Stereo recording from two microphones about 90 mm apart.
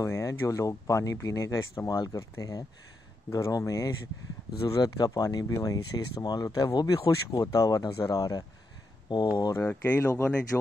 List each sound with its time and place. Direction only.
0.0 s speech: 35° left (ahead or behind)
9.1 s speech: 55° left (ahead or behind)
9.6 s speech: 25° left (ahead or behind)